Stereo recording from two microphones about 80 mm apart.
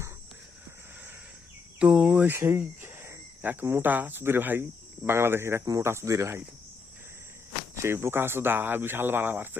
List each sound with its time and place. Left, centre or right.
1.8 s cricket: centre
2.3 s speech: right
7.8 s speech: right